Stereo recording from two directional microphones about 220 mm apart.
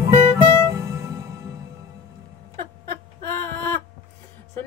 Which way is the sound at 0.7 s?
15° right (ahead or behind).